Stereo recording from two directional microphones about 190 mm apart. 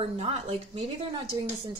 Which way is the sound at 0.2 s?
30° right (ahead or behind).